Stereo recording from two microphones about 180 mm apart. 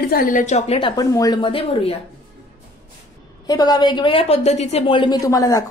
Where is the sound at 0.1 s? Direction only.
50° left (ahead or behind); by 2.0 s 30° left (ahead or behind).